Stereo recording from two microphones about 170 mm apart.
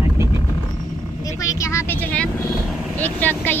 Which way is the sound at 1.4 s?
15° left (ahead or behind).